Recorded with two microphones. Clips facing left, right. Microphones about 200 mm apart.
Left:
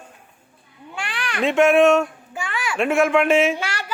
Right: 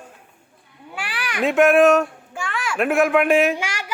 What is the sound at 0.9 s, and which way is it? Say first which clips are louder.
Speech: even; 5° right (ahead or behind).